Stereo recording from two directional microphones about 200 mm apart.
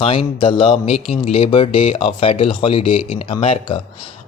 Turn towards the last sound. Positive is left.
turn(degrees=30)  # may be behind; listen again after turning